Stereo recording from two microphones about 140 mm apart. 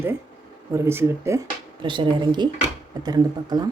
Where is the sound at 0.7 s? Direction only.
20° right (ahead or behind).